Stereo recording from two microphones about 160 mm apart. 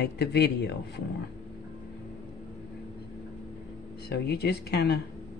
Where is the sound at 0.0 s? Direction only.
90° left.